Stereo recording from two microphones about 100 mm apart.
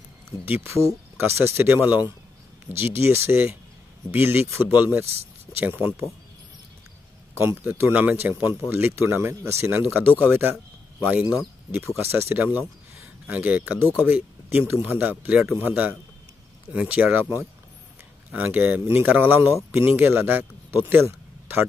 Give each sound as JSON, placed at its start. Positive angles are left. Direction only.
{"t": 0.5, "sound": "speech", "side_deg": -30}
{"t": 7.3, "sound": "speech", "side_deg": -25}
{"t": 12.0, "sound": "a man's voice", "side_deg": -25}